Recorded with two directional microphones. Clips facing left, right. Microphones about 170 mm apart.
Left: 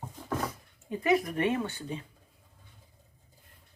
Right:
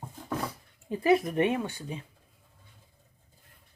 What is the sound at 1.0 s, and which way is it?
Speech, 25° right (ahead or behind).